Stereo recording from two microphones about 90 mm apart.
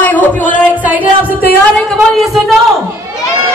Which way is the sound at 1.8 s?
5° left (ahead or behind).